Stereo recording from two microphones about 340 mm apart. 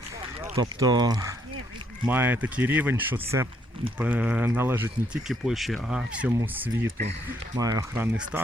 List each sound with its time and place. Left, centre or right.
0.4 s speech: centre
6.8 s speech: right
7.5 s speech: centre